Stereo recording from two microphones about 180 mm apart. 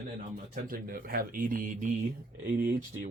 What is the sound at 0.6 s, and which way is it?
Speech, 55° right (ahead or behind).